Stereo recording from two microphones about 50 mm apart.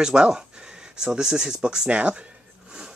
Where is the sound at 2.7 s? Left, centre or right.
Centre.